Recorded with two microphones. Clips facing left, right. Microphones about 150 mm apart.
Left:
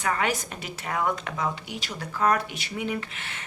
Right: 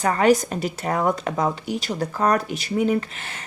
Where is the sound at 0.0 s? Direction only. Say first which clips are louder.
Right 9 dB; 40° right (ahead or behind).